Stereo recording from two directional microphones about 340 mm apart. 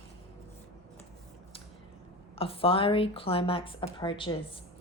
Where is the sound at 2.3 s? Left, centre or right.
Centre.